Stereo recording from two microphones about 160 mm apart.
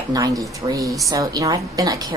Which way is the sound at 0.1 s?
20° right (ahead or behind).